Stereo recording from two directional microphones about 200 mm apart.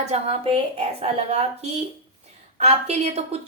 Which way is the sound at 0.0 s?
30° right (ahead or behind).